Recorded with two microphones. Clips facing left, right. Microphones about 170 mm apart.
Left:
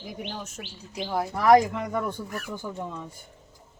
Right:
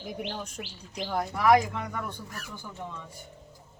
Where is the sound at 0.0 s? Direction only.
Centre (ahead or behind).